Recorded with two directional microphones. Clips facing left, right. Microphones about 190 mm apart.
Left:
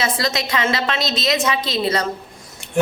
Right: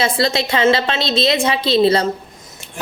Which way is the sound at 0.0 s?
30° right (ahead or behind).